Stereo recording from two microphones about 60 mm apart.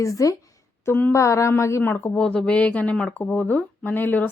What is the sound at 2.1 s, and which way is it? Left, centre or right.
Speech, centre.